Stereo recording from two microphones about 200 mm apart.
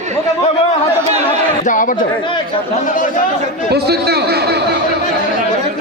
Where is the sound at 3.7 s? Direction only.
55° right (ahead or behind).